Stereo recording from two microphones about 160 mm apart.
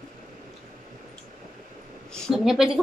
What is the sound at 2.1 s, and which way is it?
Speech, 5° right (ahead or behind).